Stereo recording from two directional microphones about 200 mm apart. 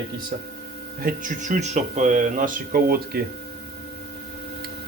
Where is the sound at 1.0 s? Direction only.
45° right (ahead or behind).